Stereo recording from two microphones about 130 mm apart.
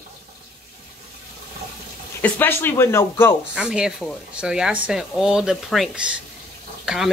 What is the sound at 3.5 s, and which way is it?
Speech, 5° right (ahead or behind).